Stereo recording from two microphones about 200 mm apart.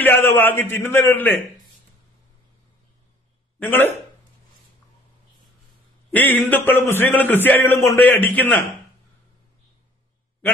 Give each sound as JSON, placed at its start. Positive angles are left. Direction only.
{"t": 0.0, "sound": "a man's voice", "side_deg": 10}
{"t": 3.5, "sound": "speech", "side_deg": 10}
{"t": 6.1, "sound": "a man's voice", "side_deg": 10}